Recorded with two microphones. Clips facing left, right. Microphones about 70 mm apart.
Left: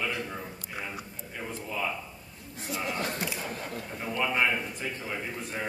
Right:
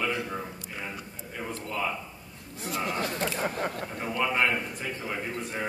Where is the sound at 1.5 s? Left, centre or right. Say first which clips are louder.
Right 1 dB; centre.